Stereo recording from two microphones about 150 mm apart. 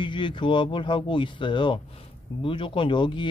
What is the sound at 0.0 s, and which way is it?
Speech, 30° left (ahead or behind).